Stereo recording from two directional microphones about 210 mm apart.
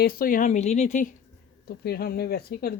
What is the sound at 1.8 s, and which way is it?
Speech, 45° left (ahead or behind).